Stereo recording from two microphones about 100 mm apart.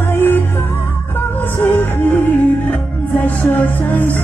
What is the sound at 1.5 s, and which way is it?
Music, 20° left (ahead or behind).